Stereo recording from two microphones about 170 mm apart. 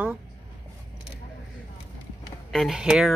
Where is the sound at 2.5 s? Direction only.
Centre (ahead or behind).